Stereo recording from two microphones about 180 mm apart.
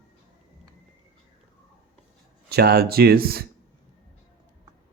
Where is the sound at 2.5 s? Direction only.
60° right (ahead or behind).